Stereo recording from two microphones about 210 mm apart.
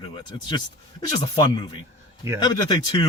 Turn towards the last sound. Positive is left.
turn(degrees=20)  # may be behind; listen again after turning